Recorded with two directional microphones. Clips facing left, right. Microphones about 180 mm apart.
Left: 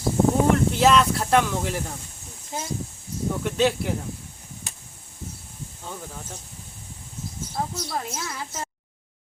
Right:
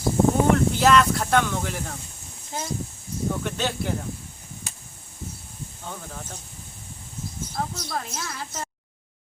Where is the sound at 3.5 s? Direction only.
Centre (ahead or behind).